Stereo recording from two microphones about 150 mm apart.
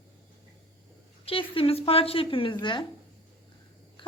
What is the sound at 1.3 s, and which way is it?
A woman's voice, 40° left (ahead or behind).